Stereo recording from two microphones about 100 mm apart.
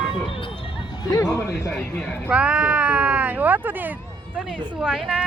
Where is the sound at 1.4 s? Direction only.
25° left (ahead or behind).